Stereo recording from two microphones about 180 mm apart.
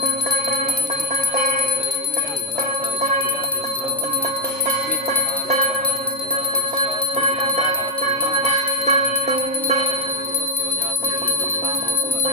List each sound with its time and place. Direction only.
1.3 s bell: 50° right (ahead or behind)
7.2 s music: 40° right (ahead or behind)
8.4 s bell: 40° right (ahead or behind)